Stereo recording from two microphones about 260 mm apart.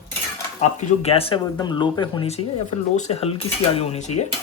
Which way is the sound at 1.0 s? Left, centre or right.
Left.